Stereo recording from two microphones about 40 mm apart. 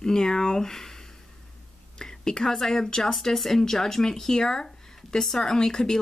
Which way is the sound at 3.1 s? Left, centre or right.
Centre.